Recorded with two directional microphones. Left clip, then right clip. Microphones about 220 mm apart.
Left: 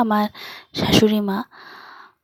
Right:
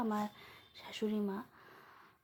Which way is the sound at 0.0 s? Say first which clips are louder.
Left 18 dB; 45° left (ahead or behind).